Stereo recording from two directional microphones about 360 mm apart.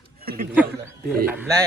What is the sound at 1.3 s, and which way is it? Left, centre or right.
Speech, centre.